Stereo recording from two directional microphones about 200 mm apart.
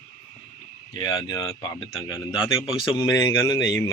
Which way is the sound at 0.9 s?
20° left (ahead or behind).